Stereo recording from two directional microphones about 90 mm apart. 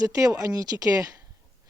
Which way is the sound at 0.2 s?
40° right (ahead or behind).